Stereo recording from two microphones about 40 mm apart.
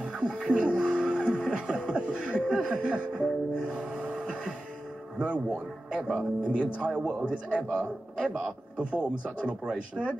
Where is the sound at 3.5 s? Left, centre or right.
Right.